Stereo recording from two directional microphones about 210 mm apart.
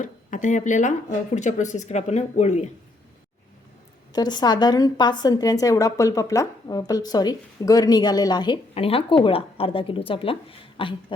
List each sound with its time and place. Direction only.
0.0 s speech: 35° left (ahead or behind)
4.1 s a woman's voice: 20° left (ahead or behind)